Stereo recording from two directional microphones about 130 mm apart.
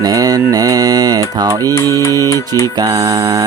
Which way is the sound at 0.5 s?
30° right (ahead or behind).